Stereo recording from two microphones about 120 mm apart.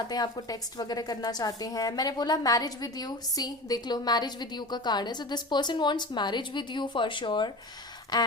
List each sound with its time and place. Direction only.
0.1 s a woman's voice: 35° left (ahead or behind)